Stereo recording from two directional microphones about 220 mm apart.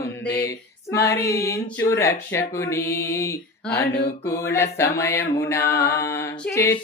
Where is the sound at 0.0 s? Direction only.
45° left (ahead or behind).